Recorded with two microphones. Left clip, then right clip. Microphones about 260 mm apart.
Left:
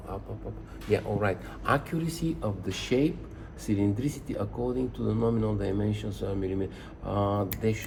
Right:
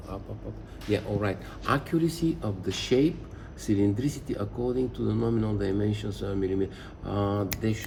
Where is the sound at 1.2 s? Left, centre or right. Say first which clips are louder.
Left 2 dB; centre.